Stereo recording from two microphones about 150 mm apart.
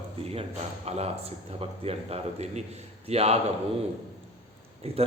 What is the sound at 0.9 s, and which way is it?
A man's voice, 45° right (ahead or behind).